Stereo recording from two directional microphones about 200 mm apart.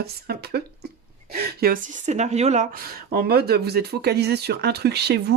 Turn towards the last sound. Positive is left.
turn(degrees=-55)  # may be behind; listen again after turning